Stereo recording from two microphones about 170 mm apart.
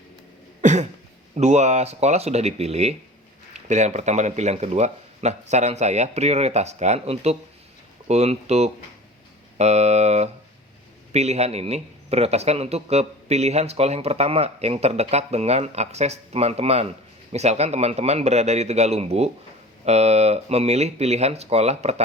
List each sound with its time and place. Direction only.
0.6 s cough: 45° right (ahead or behind)
1.4 s speech: 40° right (ahead or behind)